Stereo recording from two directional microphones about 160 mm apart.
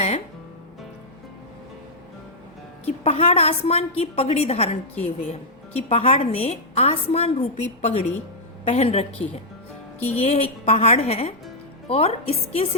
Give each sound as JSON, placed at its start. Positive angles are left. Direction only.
{"t": 2.8, "sound": "a woman's voice", "side_deg": 40}
{"t": 10.2, "sound": "a woman's voice", "side_deg": 45}